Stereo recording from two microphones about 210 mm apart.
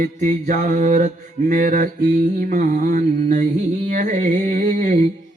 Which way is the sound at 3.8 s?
40° right (ahead or behind).